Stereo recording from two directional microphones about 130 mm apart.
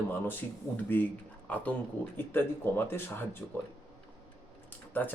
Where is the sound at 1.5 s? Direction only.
10° left (ahead or behind).